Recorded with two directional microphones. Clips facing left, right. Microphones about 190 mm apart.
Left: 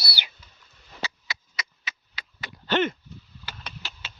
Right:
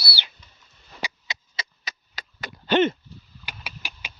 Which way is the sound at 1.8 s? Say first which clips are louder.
Right 2 dB; 40° right (ahead or behind).